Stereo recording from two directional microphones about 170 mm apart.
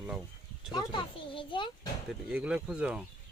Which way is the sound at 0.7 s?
25° left (ahead or behind).